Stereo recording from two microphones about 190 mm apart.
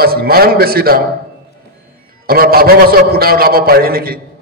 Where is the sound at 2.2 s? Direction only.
50° right (ahead or behind).